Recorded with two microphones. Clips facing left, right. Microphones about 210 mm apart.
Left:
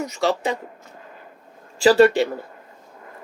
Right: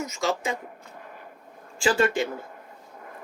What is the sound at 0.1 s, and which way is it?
Speech, 35° left (ahead or behind).